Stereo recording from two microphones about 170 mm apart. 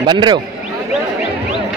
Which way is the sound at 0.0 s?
25° right (ahead or behind).